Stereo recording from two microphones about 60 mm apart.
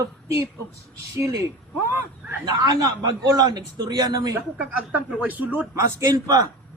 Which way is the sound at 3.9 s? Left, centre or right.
Right.